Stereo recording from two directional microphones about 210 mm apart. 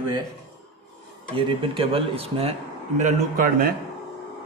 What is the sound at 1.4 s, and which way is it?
A man's voice, 25° right (ahead or behind).